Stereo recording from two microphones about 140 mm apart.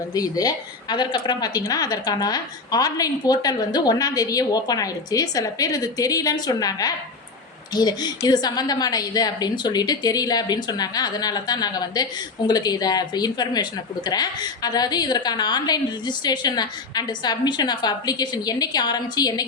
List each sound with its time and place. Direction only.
0.1 s speech: 25° left (ahead or behind)